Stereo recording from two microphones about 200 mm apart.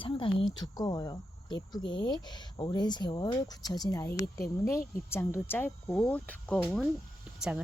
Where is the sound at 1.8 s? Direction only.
60° left (ahead or behind).